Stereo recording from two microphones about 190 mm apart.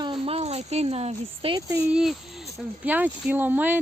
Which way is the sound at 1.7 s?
5° right (ahead or behind).